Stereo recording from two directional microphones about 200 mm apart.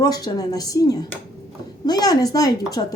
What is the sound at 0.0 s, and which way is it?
A woman's voice, 20° left (ahead or behind).